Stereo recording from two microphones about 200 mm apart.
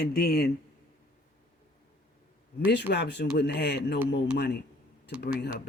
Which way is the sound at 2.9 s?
60° left (ahead or behind).